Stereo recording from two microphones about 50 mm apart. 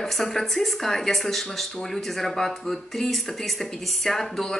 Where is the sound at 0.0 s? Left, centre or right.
Centre.